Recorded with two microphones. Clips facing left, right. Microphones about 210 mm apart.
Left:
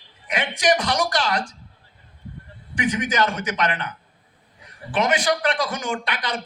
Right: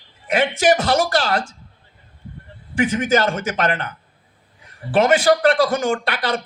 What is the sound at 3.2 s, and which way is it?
A man's voice, 45° right (ahead or behind).